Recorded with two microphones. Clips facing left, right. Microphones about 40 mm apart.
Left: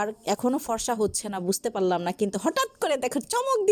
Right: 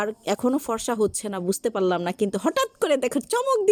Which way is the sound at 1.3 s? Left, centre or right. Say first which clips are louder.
Right 2 dB; centre.